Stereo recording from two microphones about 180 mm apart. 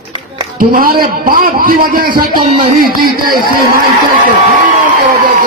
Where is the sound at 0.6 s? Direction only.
50° right (ahead or behind).